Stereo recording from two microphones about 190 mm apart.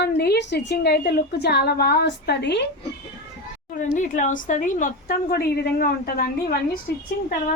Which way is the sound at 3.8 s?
45° left (ahead or behind).